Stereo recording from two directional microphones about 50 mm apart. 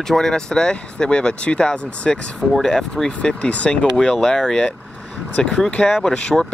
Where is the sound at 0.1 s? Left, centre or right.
Centre.